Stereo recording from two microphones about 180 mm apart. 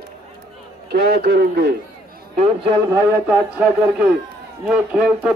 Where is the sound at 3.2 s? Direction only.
5° right (ahead or behind).